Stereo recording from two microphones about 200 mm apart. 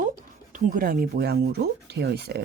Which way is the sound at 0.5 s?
45° right (ahead or behind).